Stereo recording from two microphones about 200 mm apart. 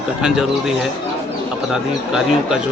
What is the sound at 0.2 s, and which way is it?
Speech, 5° right (ahead or behind).